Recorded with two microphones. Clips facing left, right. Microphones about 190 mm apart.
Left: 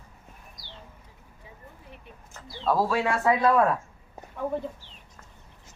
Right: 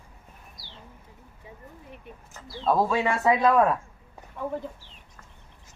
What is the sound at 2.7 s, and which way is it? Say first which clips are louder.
Speech: right 1 dB; 20° right (ahead or behind).